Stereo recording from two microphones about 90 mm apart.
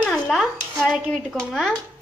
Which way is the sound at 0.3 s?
10° right (ahead or behind).